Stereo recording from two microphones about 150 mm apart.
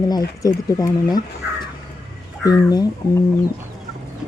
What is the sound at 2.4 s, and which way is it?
Speech, 25° left (ahead or behind).